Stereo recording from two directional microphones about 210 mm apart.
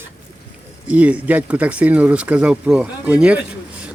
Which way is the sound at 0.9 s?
5° right (ahead or behind).